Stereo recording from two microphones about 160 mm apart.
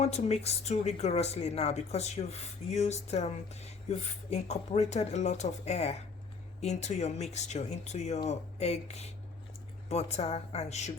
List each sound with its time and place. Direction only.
0.0 s a woman's voice: 45° left (ahead or behind)